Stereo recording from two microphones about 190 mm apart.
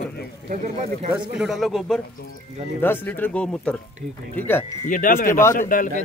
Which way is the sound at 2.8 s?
10° left (ahead or behind).